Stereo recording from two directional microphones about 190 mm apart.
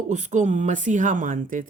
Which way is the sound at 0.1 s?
40° right (ahead or behind).